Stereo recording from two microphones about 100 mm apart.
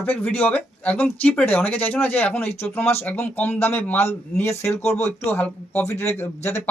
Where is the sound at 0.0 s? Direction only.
20° left (ahead or behind).